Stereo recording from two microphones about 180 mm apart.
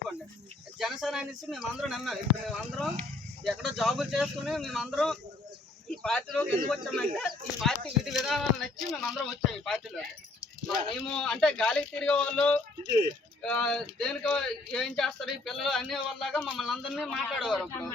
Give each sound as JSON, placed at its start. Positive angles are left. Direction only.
{"t": 0.8, "sound": "speech", "side_deg": 0}
{"t": 12.8, "sound": "speech", "side_deg": 25}
{"t": 13.4, "sound": "speech", "side_deg": 5}